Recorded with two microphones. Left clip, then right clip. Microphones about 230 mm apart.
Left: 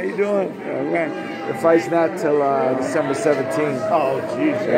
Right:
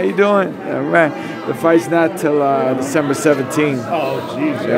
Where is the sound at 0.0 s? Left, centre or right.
Right.